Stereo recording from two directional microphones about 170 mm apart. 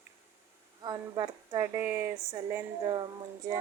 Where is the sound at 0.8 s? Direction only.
25° right (ahead or behind).